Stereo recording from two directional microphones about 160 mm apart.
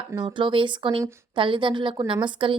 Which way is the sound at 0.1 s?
30° right (ahead or behind).